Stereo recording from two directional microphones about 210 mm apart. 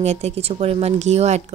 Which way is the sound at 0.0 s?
30° right (ahead or behind).